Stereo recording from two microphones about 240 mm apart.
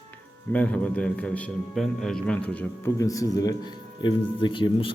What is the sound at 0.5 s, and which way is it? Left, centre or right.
A man's voice, centre.